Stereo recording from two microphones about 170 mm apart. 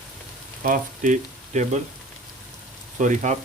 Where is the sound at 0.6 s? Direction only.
50° right (ahead or behind).